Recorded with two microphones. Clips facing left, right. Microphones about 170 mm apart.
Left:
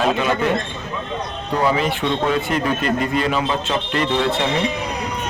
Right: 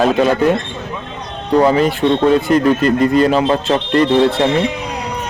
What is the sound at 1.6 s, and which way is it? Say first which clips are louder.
Speech: right 7 dB; 40° right (ahead or behind).